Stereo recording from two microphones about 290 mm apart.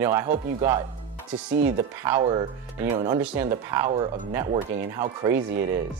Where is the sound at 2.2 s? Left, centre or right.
Centre.